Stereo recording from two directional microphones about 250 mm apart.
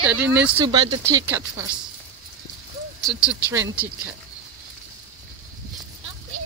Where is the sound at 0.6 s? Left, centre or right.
Centre.